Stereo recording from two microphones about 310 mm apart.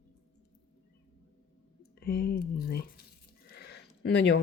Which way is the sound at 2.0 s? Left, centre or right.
Left.